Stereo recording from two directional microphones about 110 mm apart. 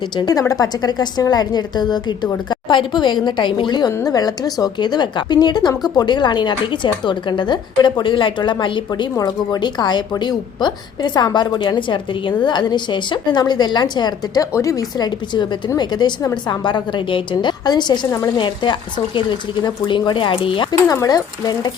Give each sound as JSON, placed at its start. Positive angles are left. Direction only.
{"t": 0.2, "sound": "a woman's voice", "side_deg": 35}
{"t": 14.6, "sound": "a woman's voice", "side_deg": 30}
{"t": 20.8, "sound": "a woman's voice", "side_deg": 30}